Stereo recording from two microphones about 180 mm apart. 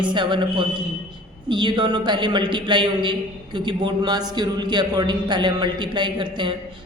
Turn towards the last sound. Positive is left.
turn(degrees=-25)  # may be behind; listen again after turning